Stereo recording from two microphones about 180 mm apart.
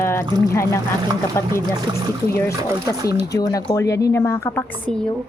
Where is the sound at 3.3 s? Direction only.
20° left (ahead or behind).